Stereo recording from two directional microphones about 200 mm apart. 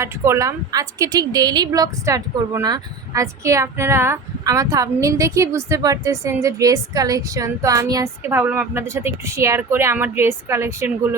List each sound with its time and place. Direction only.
0.0 s a woman's voice: 15° right (ahead or behind)